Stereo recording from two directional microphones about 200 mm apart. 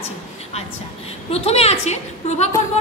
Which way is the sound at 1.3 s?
30° left (ahead or behind).